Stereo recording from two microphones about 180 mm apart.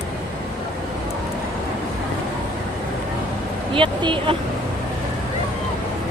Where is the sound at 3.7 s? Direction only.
30° right (ahead or behind).